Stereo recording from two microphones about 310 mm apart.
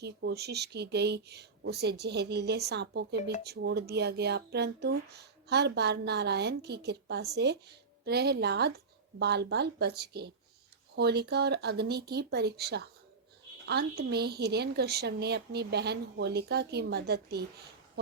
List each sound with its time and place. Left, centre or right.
0.0 s speech: right